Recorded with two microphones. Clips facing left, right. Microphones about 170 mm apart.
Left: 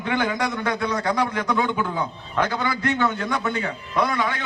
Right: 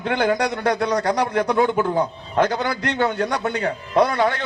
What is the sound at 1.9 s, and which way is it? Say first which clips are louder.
A man's voice: right 5 dB; 45° right (ahead or behind).